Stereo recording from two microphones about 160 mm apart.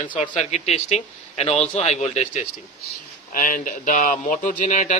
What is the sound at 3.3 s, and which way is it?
Speech, 55° left (ahead or behind).